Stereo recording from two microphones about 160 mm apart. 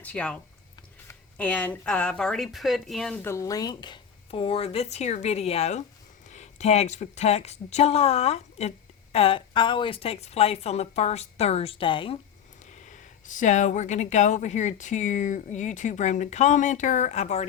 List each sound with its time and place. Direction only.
0.0 s a woman's voice: 10° left (ahead or behind)
3.2 s a woman's voice: 15° left (ahead or behind)
12.7 s speech: 50° left (ahead or behind)